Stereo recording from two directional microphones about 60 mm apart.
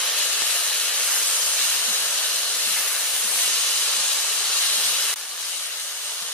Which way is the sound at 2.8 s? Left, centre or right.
Centre.